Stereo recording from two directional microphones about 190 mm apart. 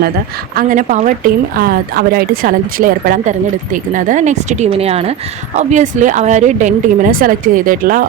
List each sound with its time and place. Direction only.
0.5 s speech: 45° right (ahead or behind)